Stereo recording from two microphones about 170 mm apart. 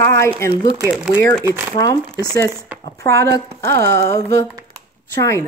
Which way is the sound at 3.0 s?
20° left (ahead or behind).